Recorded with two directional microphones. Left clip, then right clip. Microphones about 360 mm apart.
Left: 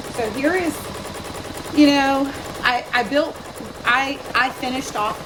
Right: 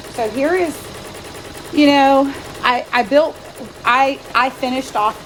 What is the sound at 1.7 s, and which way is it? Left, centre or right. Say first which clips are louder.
A woman's voice: right 5 dB; right.